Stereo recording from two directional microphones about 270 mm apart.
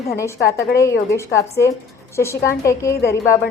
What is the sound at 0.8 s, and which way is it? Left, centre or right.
A woman's voice, centre.